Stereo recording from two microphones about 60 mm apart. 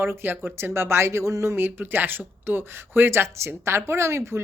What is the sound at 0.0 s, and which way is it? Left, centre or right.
Speech, right.